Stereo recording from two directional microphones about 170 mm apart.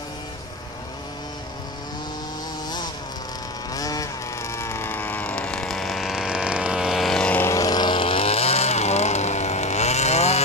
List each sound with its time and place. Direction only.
3.7 s vehicle: 20° left (ahead or behind); by 10.4 s 40° left (ahead or behind)